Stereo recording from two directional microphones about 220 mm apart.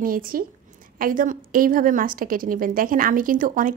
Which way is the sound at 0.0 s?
40° right (ahead or behind).